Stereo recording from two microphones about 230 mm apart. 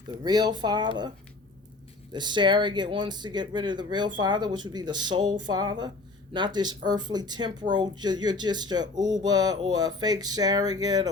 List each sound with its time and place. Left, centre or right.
0.2 s speech: centre
2.1 s speech: centre